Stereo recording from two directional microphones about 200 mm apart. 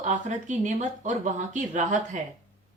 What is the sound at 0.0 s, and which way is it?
A woman's voice, 40° right (ahead or behind).